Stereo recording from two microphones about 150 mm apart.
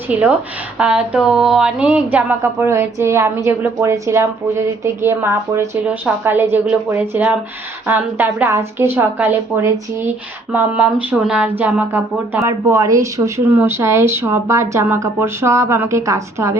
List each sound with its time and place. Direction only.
0.1 s a woman's voice: 10° right (ahead or behind)